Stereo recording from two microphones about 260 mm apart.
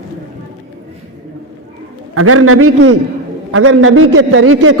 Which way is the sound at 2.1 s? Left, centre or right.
Right.